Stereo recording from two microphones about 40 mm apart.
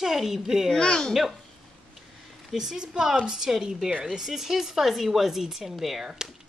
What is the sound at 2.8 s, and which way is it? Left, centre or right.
A woman's voice, right.